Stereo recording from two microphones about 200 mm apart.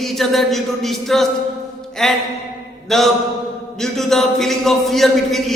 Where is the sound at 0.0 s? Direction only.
Centre (ahead or behind).